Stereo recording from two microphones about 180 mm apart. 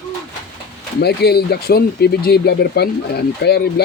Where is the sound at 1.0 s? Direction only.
65° left (ahead or behind).